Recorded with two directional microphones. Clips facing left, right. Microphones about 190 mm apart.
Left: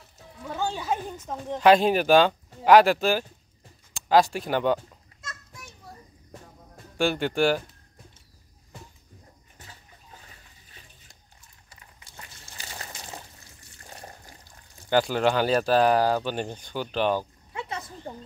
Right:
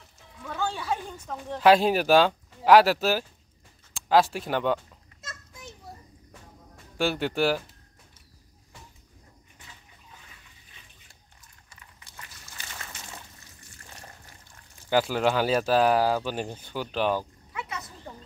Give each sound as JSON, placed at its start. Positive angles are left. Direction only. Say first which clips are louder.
{"t": 0.4, "sound": "a sound", "louder": "left 1 dB", "side_deg": 20}
{"t": 1.6, "sound": "speech", "louder": "left 1 dB", "side_deg": -5}
{"t": 5.2, "sound": "children playing", "louder": "even", "side_deg": -25}
{"t": 7.0, "sound": "speech", "louder": "left 2 dB", "side_deg": -5}
{"t": 9.6, "sound": "bathtub", "louder": "left 3 dB", "side_deg": 40}
{"t": 11.7, "sound": "a sound", "louder": "left 1 dB", "side_deg": 35}
{"t": 13.8, "sound": "water", "louder": "left 5 dB", "side_deg": 35}
{"t": 14.9, "sound": "speech", "louder": "left 1 dB", "side_deg": -5}
{"t": 17.5, "sound": "a sound", "louder": "left 2 dB", "side_deg": 30}